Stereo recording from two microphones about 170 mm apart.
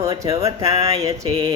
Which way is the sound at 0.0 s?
20° right (ahead or behind).